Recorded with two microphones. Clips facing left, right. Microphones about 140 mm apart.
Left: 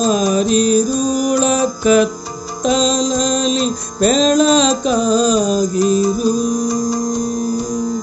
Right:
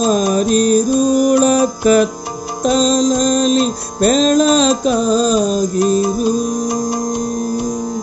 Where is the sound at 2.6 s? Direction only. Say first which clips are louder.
Right 2 dB; 40° right (ahead or behind).